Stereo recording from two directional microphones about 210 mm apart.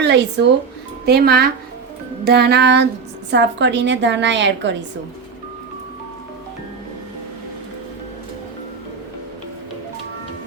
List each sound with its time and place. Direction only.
0.0 s speech: 55° right (ahead or behind)
1.0 s music: 50° right (ahead or behind)
3.3 s a woman's voice: 55° right (ahead or behind)